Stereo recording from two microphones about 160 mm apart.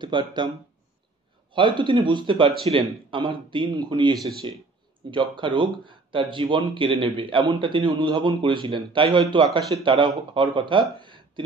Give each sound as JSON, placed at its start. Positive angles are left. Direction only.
{"t": 0.0, "sound": "speech", "side_deg": -30}
{"t": 1.5, "sound": "speech", "side_deg": -30}